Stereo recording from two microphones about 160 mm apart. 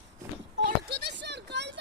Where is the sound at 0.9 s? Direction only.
90° right.